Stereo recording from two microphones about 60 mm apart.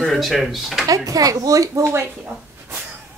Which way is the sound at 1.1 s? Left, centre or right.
Right.